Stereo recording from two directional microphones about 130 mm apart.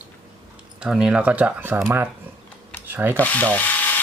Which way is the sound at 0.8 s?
5° right (ahead or behind).